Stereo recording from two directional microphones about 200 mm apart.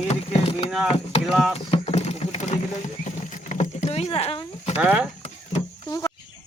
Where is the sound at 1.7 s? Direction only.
35° left (ahead or behind).